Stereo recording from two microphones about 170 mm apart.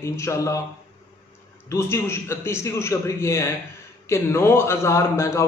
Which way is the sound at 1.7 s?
15° left (ahead or behind).